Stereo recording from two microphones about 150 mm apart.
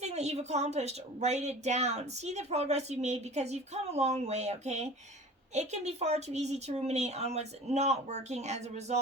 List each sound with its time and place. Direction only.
0.0 s a woman's voice: 50° right (ahead or behind)